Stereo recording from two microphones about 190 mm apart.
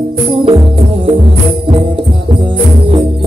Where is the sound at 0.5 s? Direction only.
25° right (ahead or behind).